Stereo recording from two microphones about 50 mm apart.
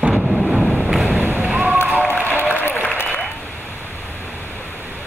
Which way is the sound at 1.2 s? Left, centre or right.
Right.